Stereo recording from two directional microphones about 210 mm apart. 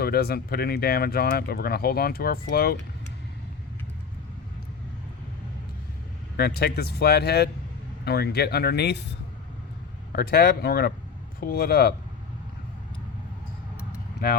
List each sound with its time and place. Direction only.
0.0 s speech: 50° left (ahead or behind)
6.3 s speech: 50° left (ahead or behind)
10.1 s speech: 45° left (ahead or behind)